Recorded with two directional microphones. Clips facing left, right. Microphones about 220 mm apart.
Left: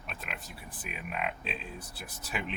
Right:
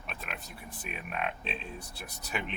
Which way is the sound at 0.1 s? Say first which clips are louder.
Even; centre (ahead or behind).